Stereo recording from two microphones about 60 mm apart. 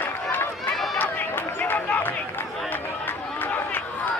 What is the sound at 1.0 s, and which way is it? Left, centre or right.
Run, left.